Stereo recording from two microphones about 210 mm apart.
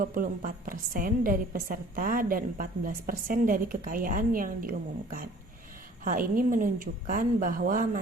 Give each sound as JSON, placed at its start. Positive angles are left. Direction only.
{"t": 0.0, "sound": "a woman's voice", "side_deg": -40}
{"t": 6.1, "sound": "a woman's voice", "side_deg": -40}